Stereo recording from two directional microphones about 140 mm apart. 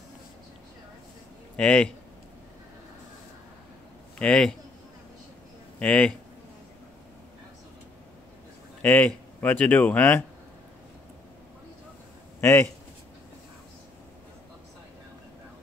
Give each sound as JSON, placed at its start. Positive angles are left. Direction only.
{"t": 1.6, "sound": "speech", "side_deg": 5}
{"t": 4.2, "sound": "a man's voice", "side_deg": 5}
{"t": 5.8, "sound": "speech", "side_deg": 10}
{"t": 8.8, "sound": "speech", "side_deg": 10}
{"t": 12.4, "sound": "speech", "side_deg": 15}